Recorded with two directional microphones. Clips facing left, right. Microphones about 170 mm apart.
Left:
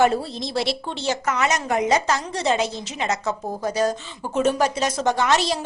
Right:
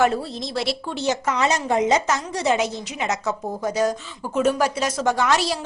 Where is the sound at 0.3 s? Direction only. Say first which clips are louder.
Left 1 dB; centre (ahead or behind).